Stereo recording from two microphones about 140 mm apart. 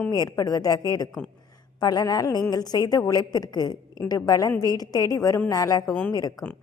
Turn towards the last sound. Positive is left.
turn(degrees=25)  # may be behind; listen again after turning